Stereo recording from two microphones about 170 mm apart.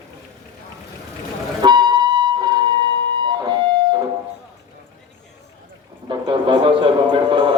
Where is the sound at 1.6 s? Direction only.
25° right (ahead or behind).